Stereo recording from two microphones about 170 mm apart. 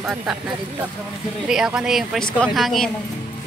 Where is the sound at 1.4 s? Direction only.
5° right (ahead or behind).